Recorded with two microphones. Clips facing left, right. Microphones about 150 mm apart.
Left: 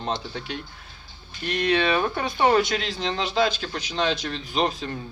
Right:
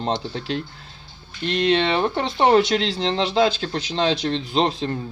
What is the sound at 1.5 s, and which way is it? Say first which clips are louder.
Speech: right 3 dB; 25° right (ahead or behind).